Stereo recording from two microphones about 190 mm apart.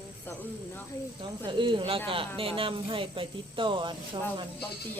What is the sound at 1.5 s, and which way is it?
Speech, 25° right (ahead or behind).